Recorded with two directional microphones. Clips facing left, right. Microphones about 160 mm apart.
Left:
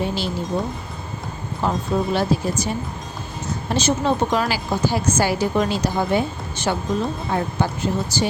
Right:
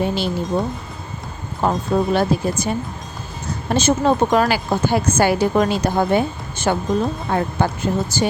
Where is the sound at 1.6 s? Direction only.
55° right (ahead or behind).